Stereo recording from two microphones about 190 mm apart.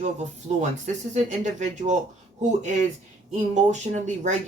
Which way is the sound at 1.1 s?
40° right (ahead or behind).